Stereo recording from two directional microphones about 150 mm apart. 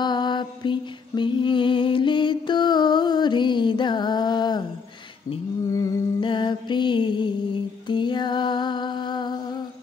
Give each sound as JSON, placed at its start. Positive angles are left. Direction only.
{"t": 0.0, "sound": "mantra", "side_deg": 30}
{"t": 5.7, "sound": "music", "side_deg": 20}
{"t": 6.2, "sound": "music", "side_deg": 30}